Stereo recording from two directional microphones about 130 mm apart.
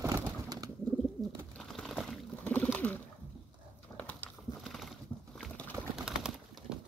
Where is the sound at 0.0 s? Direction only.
25° right (ahead or behind).